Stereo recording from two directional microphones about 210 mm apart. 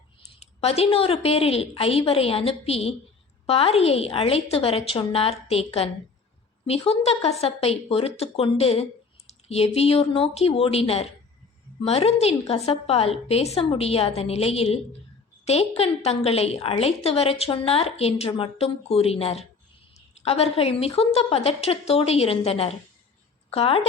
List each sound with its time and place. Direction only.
0.3 s speech: 30° left (ahead or behind)